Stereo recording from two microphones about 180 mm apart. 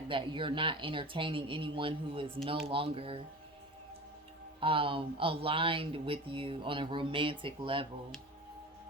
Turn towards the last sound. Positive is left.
turn(degrees=-30)  # may be behind; listen again after turning